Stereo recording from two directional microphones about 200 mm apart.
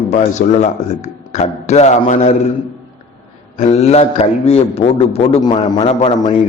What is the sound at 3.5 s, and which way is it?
A man's voice, 30° left (ahead or behind).